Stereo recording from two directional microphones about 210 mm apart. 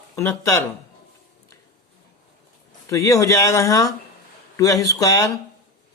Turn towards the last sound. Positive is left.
turn(degrees=15)  # may be behind; listen again after turning